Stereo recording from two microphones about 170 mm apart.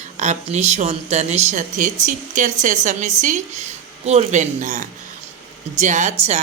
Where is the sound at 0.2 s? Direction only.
45° right (ahead or behind).